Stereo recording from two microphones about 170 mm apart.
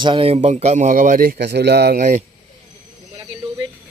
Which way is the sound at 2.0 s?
45° right (ahead or behind).